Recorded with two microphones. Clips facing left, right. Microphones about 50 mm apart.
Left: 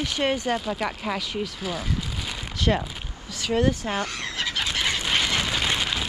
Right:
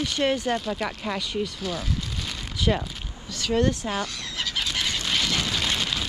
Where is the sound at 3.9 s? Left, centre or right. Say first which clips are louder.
Left 1 dB; left; by 6.0 s centre.